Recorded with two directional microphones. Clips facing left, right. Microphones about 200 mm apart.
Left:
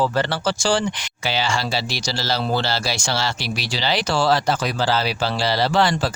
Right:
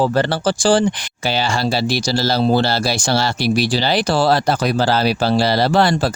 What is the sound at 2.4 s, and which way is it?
Speech, 30° right (ahead or behind).